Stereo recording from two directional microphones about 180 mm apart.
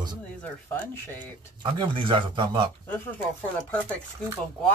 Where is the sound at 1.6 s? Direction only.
25° right (ahead or behind).